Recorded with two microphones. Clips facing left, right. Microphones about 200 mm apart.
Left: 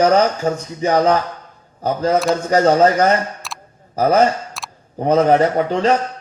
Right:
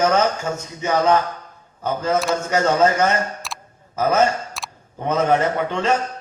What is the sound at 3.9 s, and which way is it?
Speech, 35° left (ahead or behind).